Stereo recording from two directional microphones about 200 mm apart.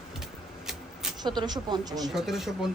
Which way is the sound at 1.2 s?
20° right (ahead or behind).